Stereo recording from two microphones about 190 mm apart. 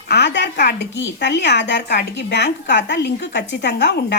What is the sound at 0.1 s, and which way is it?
Speech, 65° left (ahead or behind).